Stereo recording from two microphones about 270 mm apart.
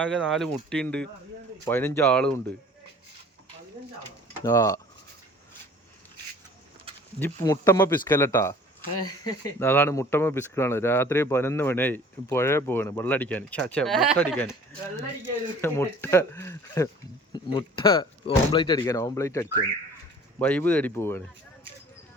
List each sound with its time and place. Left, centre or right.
0.0 s speech: centre
4.4 s speech: centre
7.2 s speech: centre
15.6 s speech: centre